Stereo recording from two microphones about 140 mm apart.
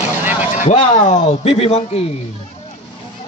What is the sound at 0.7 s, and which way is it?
Speech, 60° left (ahead or behind).